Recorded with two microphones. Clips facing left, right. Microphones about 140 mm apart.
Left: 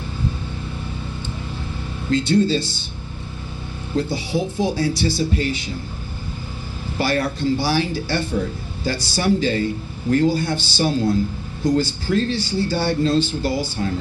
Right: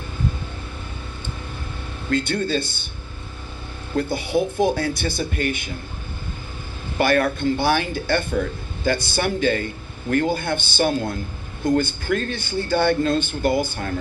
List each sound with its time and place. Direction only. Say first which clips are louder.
2.0 s speech: left 5 dB; 55° right (ahead or behind)
3.9 s speech: right 1 dB; 55° right (ahead or behind)
7.0 s speech: right 2 dB; 55° right (ahead or behind)